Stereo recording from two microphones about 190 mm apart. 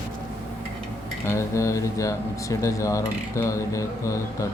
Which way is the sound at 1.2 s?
15° left (ahead or behind).